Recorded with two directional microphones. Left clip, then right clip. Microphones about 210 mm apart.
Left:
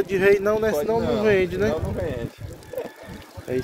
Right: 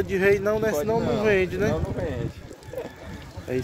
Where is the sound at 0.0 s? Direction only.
10° left (ahead or behind).